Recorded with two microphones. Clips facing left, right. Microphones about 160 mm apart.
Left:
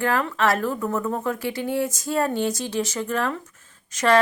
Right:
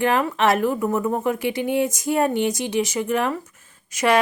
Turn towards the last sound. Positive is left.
turn(degrees=-10)  # may be behind; listen again after turning